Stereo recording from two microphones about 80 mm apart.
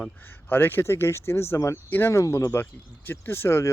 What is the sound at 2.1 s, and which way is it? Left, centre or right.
Speech, left.